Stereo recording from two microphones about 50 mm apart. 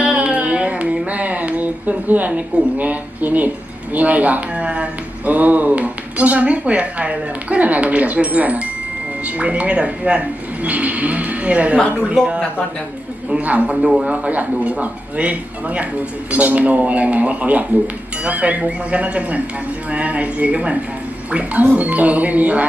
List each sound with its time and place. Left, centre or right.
0.0 s music: right
0.5 s a sound: right
1.1 s speech: right
13.3 s speech: right
13.8 s speech: centre
14.1 s speech: right